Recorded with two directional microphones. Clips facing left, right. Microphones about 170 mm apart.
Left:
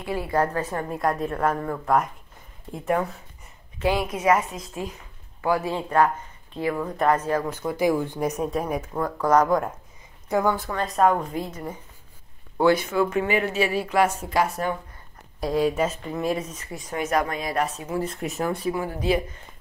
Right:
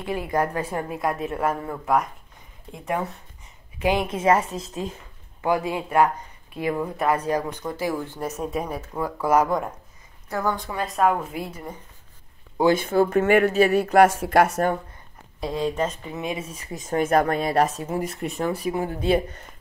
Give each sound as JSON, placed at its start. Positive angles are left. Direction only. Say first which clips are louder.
{"t": 0.0, "sound": "speech", "louder": "even", "side_deg": -20}
{"t": 3.8, "sound": "a woman's voice", "louder": "right 1 dB", "side_deg": -20}
{"t": 7.7, "sound": "speech", "louder": "left 6 dB", "side_deg": 15}
{"t": 8.4, "sound": "speech", "louder": "left 2 dB", "side_deg": -5}
{"t": 10.3, "sound": "speech", "louder": "left 3 dB", "side_deg": 15}
{"t": 10.7, "sound": "speech", "louder": "right 1 dB", "side_deg": -5}
{"t": 12.9, "sound": "speech", "louder": "right 5 dB", "side_deg": -40}
{"t": 13.9, "sound": "speech", "louder": "right 5 dB", "side_deg": -70}
{"t": 15.4, "sound": "speech", "louder": "left 2 dB", "side_deg": 5}
{"t": 16.1, "sound": "speech", "louder": "left 3 dB", "side_deg": 0}
{"t": 16.8, "sound": "speech", "louder": "right 4 dB", "side_deg": -50}
{"t": 17.3, "sound": "speech", "louder": "right 5 dB", "side_deg": -35}
{"t": 18.2, "sound": "speech", "louder": "right 1 dB", "side_deg": 5}
{"t": 18.7, "sound": "a woman's voice", "louder": "right 1 dB", "side_deg": -25}